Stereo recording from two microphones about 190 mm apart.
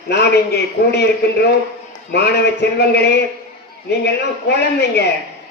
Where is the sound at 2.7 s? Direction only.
60° left (ahead or behind).